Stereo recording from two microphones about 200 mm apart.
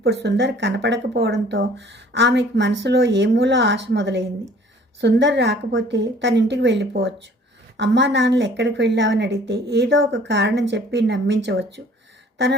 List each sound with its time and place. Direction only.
0.0 s speech: 60° right (ahead or behind)